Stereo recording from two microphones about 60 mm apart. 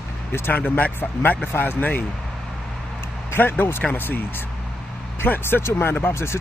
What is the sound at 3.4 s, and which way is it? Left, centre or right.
Speech, left.